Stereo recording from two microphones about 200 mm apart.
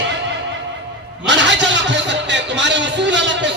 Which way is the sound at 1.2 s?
65° right (ahead or behind).